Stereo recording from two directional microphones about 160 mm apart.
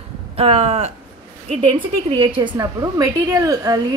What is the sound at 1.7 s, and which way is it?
A woman's voice, 30° right (ahead or behind).